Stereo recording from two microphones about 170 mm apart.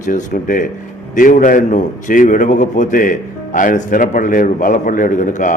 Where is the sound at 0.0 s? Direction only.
50° left (ahead or behind).